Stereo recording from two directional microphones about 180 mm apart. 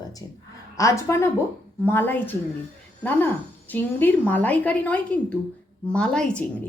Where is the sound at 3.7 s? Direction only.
10° left (ahead or behind).